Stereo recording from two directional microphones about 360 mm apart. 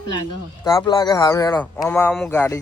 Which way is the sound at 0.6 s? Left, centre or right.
Centre.